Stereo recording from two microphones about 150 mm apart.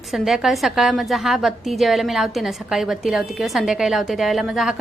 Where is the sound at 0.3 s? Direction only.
Centre (ahead or behind).